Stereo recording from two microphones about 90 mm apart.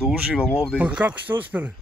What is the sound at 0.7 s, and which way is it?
Speech, 15° right (ahead or behind).